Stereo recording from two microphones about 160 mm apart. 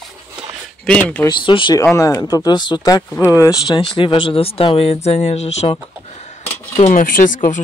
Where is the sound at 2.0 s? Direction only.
20° left (ahead or behind).